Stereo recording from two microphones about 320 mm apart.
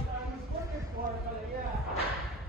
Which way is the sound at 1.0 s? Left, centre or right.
Right.